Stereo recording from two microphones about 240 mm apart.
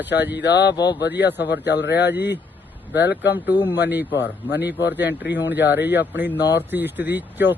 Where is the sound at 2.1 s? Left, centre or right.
Centre.